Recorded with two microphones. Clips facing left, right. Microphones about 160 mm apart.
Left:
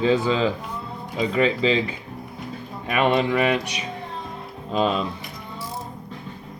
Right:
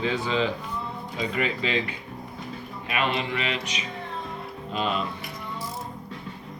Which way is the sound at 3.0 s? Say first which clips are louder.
Left 11 dB; 50° left (ahead or behind).